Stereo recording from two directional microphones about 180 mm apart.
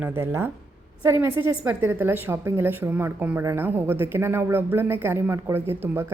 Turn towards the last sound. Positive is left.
turn(degrees=-10)  # may be behind; listen again after turning